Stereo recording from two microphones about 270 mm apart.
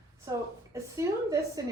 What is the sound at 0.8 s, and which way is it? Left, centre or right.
Speech, centre.